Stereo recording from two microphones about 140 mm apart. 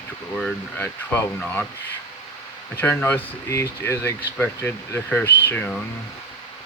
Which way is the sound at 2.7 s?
15° left (ahead or behind).